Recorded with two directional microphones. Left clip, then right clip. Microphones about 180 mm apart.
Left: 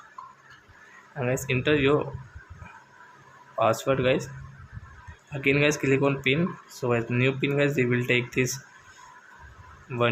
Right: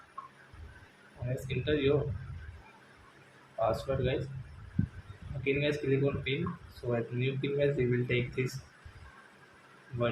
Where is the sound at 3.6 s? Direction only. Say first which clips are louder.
Left 8 dB; 35° left (ahead or behind).